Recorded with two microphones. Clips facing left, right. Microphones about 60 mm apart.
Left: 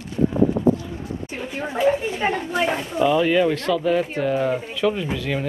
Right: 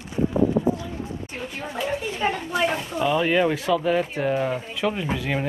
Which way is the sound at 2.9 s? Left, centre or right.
Centre.